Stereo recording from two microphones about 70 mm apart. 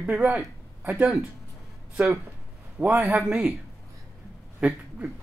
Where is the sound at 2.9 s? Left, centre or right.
Right.